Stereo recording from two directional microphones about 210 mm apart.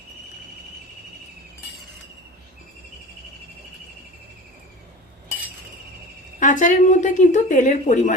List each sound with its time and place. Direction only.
6.4 s a woman's voice: 35° left (ahead or behind)